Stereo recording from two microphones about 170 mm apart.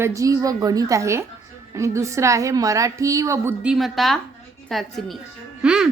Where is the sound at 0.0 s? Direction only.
20° right (ahead or behind).